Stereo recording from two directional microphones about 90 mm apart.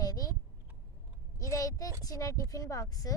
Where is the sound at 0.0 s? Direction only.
45° left (ahead or behind).